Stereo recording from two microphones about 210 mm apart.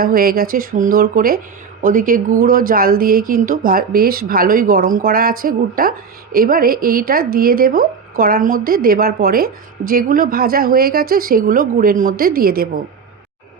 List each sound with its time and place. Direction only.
0.0 s a woman's voice: 45° right (ahead or behind)